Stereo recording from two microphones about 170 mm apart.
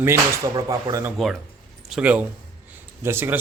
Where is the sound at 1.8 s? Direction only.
5° right (ahead or behind).